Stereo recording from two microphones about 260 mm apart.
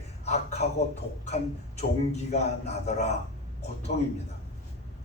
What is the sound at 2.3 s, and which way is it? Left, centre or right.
Speech, left.